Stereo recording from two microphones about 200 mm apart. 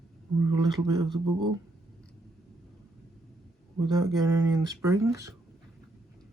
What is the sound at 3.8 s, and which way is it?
Speech, 20° right (ahead or behind).